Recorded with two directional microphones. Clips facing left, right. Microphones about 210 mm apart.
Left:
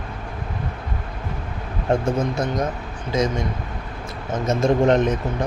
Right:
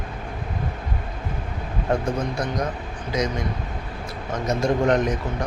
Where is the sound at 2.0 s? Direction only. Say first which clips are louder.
Left 3 dB; 25° left (ahead or behind).